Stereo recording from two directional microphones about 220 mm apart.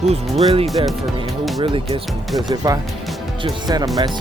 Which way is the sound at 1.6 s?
25° right (ahead or behind).